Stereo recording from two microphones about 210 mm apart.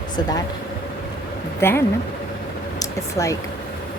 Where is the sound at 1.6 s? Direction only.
10° left (ahead or behind).